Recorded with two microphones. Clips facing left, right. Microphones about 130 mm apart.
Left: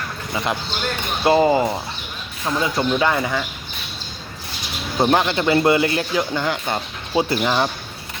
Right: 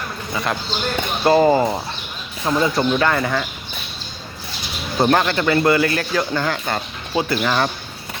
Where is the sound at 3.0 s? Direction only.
15° left (ahead or behind).